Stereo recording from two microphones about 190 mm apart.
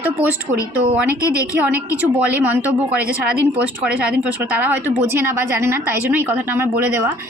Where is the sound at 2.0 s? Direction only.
10° right (ahead or behind).